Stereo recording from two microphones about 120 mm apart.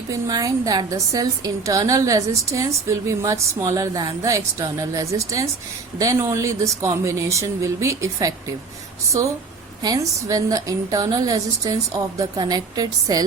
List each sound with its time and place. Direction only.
0.1 s a woman's voice: 30° right (ahead or behind)
9.8 s a woman's voice: 30° right (ahead or behind)